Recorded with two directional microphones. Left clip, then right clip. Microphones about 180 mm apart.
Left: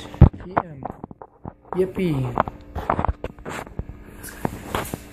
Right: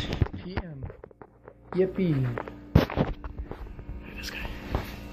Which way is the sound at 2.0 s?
55° left (ahead or behind).